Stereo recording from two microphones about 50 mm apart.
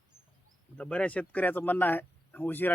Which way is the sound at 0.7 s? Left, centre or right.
Left.